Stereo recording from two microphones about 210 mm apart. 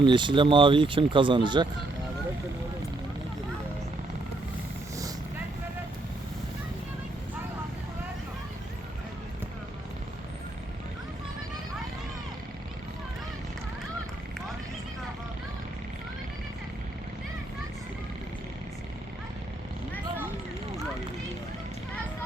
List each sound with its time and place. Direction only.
0.0 s speech: 20° right (ahead or behind)